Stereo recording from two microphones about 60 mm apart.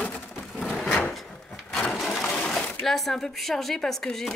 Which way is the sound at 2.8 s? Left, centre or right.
Centre.